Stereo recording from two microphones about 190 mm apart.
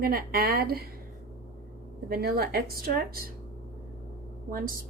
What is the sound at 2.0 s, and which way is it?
Speech, 55° right (ahead or behind).